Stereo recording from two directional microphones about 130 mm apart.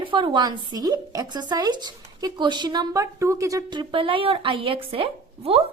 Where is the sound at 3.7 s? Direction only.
40° right (ahead or behind).